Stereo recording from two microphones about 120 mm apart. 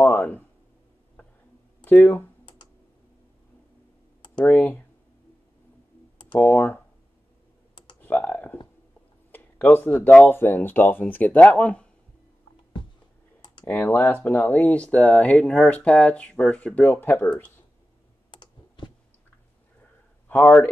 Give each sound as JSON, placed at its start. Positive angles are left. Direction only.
{"t": 0.0, "sound": "a sound", "side_deg": 15}
{"t": 1.9, "sound": "speech", "side_deg": 15}
{"t": 4.5, "sound": "speech", "side_deg": 15}
{"t": 6.3, "sound": "speech", "side_deg": 15}
{"t": 8.0, "sound": "computer keyboard", "side_deg": 15}
{"t": 9.3, "sound": "a sound", "side_deg": 15}
{"t": 10.0, "sound": "speech", "side_deg": 15}
{"t": 13.7, "sound": "speech", "side_deg": 15}
{"t": 18.3, "sound": "computer keyboard", "side_deg": 40}
{"t": 20.2, "sound": "speech", "side_deg": 15}